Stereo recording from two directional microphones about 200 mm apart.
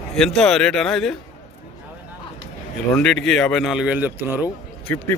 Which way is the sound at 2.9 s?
5° left (ahead or behind).